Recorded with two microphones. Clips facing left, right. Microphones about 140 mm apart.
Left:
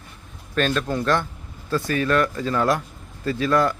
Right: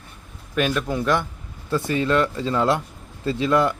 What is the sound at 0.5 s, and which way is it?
A man's voice, 10° right (ahead or behind).